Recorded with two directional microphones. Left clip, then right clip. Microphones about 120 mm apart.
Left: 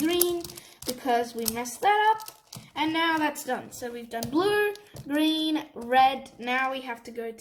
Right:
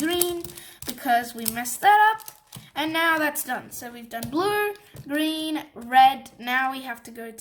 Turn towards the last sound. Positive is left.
turn(degrees=-25)  # may be behind; listen again after turning